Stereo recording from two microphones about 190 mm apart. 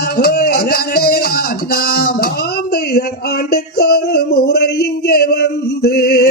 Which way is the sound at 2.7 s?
55° left (ahead or behind).